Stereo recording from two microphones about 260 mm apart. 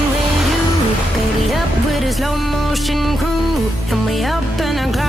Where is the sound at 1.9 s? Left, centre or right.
Centre.